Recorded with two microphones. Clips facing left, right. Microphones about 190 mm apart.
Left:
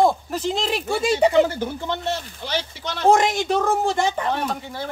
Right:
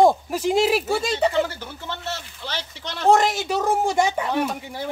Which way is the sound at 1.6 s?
55° left (ahead or behind).